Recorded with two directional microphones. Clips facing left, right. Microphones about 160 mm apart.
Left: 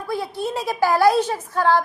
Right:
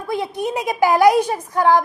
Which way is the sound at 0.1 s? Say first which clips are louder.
Right 3 dB; 20° right (ahead or behind).